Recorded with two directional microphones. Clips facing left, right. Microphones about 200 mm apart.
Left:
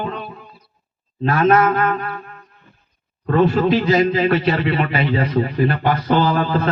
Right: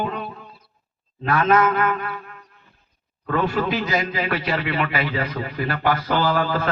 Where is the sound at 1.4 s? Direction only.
30° left (ahead or behind).